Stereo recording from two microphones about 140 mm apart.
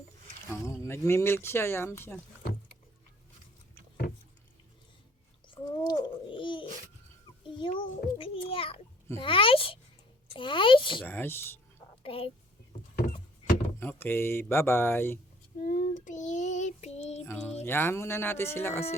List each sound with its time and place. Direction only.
0.5 s speech: 20° left (ahead or behind)
5.9 s babbling: 35° left (ahead or behind)
7.5 s a sound: 35° left (ahead or behind)
11.0 s speech: 15° left (ahead or behind)
12.0 s a sound: 40° left (ahead or behind)
13.0 s rowboat: 80° left
13.7 s door: 15° left (ahead or behind)
14.5 s speech: 15° left (ahead or behind)
15.6 s child singing: 85° left; by 17.2 s 50° left (ahead or behind)
17.2 s speech: 10° left (ahead or behind)